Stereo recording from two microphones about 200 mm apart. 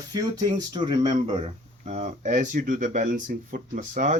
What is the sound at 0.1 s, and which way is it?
Speech, 20° right (ahead or behind).